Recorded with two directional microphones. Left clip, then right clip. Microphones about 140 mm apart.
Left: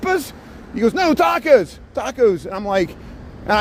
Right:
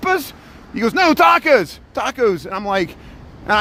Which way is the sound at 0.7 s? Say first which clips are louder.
Right 2 dB; 40° right (ahead or behind).